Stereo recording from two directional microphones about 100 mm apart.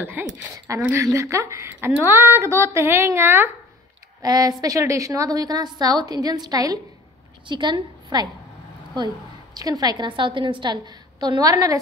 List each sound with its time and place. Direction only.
0.0 s speech: 20° right (ahead or behind)
0.9 s speech: 30° right (ahead or behind)
4.2 s a woman's voice: 40° right (ahead or behind)
7.4 s a woman's voice: 50° right (ahead or behind)
9.6 s a woman's voice: 40° right (ahead or behind)